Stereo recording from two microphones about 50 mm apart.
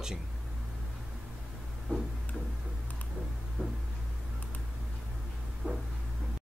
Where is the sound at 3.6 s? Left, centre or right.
Centre.